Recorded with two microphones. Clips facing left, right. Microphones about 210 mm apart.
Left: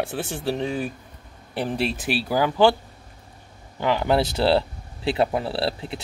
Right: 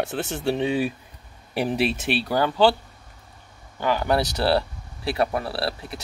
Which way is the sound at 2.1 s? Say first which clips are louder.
Left 3 dB; 5° left (ahead or behind).